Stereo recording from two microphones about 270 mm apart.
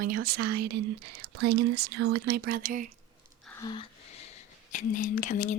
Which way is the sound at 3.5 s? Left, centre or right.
Centre.